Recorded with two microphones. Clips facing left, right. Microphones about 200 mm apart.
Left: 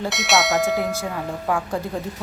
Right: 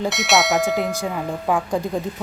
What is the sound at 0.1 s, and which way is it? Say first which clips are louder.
Speech: even; centre (ahead or behind).